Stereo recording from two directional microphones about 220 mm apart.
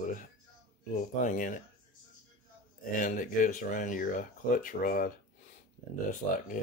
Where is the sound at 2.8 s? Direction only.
35° left (ahead or behind).